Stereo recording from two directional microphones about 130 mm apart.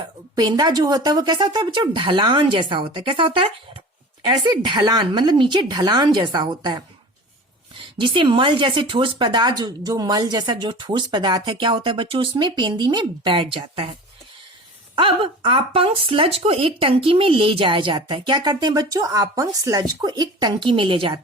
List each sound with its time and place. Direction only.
0.3 s speech: 30° right (ahead or behind)
7.9 s speech: 40° right (ahead or behind)
14.9 s speech: 40° right (ahead or behind)